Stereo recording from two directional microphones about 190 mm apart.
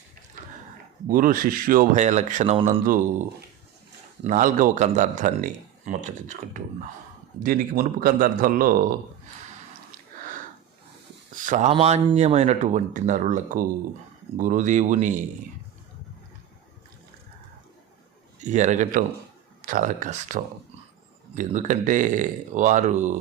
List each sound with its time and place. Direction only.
1.0 s speech: 45° right (ahead or behind)
11.3 s a sound: 40° right (ahead or behind)
11.7 s speech: 35° right (ahead or behind)
18.3 s speech: 40° right (ahead or behind)